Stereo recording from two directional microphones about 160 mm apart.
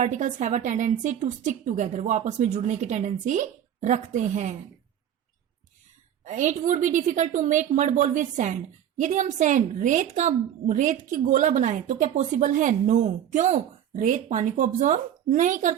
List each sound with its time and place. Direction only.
0.0 s a woman's voice: 50° right (ahead or behind)
6.2 s a woman's voice: 50° right (ahead or behind)